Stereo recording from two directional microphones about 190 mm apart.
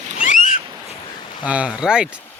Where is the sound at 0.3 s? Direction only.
45° left (ahead or behind).